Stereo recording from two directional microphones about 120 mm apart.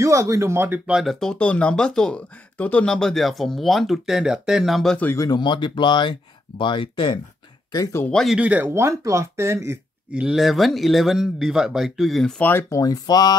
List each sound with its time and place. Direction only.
0.0 s speech: 25° right (ahead or behind)
0.9 s speech: centre (ahead or behind)
5.1 s speech: 30° left (ahead or behind)
7.7 s speech: 30° left (ahead or behind)
8.0 s speech: 5° left (ahead or behind)
8.4 s speech: 15° right (ahead or behind)
10.1 s speech: 5° right (ahead or behind)
12.4 s speech: 20° left (ahead or behind)